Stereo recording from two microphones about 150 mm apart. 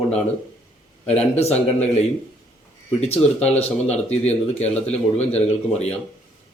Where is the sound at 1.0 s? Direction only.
45° left (ahead or behind).